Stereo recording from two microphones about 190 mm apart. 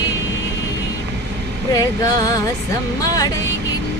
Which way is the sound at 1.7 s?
20° left (ahead or behind).